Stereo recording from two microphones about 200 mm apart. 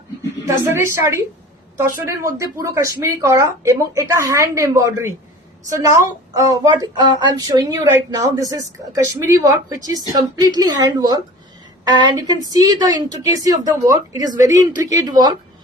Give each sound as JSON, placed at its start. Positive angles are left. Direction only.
{"t": 0.4, "sound": "a woman's voice", "side_deg": -10}